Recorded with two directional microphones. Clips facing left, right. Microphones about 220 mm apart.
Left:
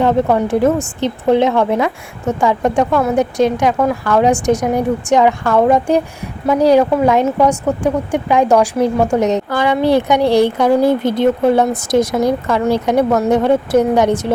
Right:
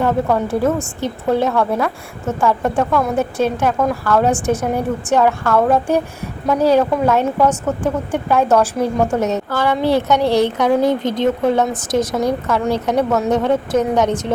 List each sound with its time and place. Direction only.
0.0 s a woman's voice: 15° left (ahead or behind)